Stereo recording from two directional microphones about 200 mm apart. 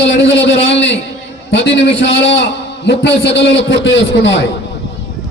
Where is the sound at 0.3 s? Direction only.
65° left (ahead or behind).